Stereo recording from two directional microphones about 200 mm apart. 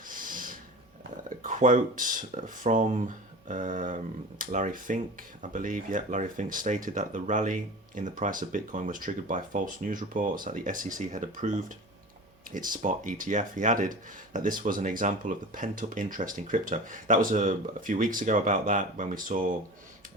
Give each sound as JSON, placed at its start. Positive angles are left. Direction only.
{"t": 0.0, "sound": "owl", "side_deg": -40}
{"t": 1.3, "sound": "speech", "side_deg": -40}